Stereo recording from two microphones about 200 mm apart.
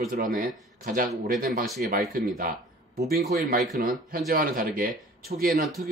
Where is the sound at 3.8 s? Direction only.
45° right (ahead or behind).